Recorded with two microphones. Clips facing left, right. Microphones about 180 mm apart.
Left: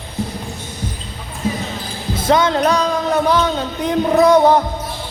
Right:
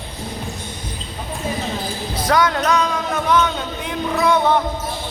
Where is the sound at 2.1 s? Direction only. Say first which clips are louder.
Left 3 dB; 25° left (ahead or behind).